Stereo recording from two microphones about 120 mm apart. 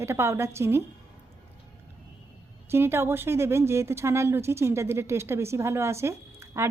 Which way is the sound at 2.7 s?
20° right (ahead or behind).